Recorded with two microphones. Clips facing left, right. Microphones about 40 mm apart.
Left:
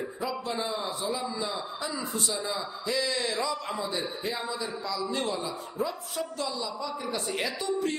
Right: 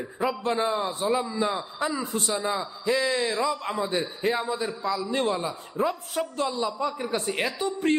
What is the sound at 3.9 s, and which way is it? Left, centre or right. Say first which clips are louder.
A woman's voice: right 6 dB; right.